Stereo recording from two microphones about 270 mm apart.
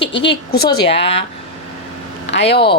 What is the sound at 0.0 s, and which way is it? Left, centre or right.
Speech, left.